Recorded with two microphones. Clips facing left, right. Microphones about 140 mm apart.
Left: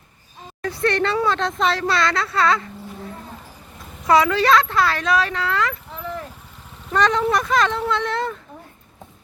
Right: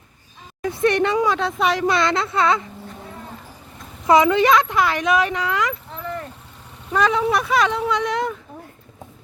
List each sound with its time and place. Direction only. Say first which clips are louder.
0.6 s speech: right 2 dB; 15° right (ahead or behind)
4.0 s speech: right 2 dB; 20° right (ahead or behind)
5.9 s a sound: right 1 dB; centre (ahead or behind)
6.9 s speech: even; 5° right (ahead or behind)